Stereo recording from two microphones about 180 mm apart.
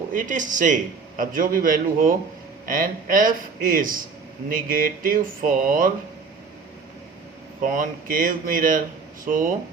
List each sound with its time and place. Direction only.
0.1 s speech: 45° right (ahead or behind)
7.6 s speech: 45° right (ahead or behind)